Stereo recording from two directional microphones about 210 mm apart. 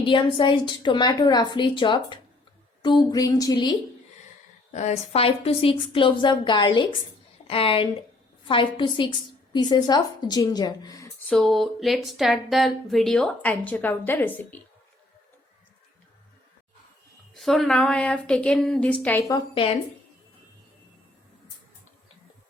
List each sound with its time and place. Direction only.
0.0 s a woman's voice: 25° left (ahead or behind)
4.7 s a woman's voice: 35° left (ahead or behind); by 11.3 s 15° left (ahead or behind)
11.3 s speech: centre (ahead or behind)
17.3 s a woman's voice: centre (ahead or behind)